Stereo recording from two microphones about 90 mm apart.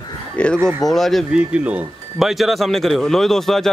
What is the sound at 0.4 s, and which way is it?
Speech, 15° left (ahead or behind).